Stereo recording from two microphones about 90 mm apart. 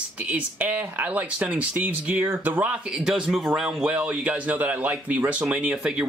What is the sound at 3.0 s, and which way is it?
A man's voice, 10° right (ahead or behind).